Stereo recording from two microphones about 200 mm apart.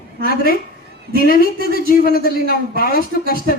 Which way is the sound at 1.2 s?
45° left (ahead or behind).